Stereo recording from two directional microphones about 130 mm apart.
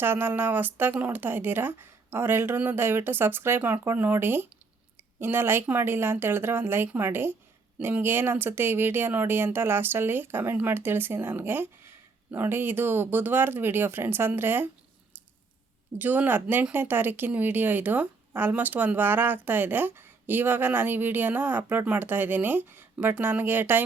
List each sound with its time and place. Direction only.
0.0 s speech: 15° right (ahead or behind)
16.0 s speech: 15° right (ahead or behind)